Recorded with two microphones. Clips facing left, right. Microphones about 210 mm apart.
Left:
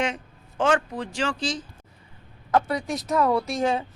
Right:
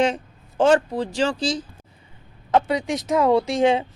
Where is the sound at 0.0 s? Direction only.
35° right (ahead or behind).